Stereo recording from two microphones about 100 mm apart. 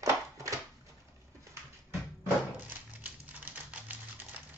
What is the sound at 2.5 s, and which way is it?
Typewriter, 20° right (ahead or behind).